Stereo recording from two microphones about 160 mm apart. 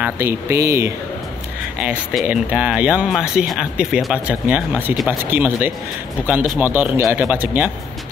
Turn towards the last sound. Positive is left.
turn(degrees=-10)  # may be behind; listen again after turning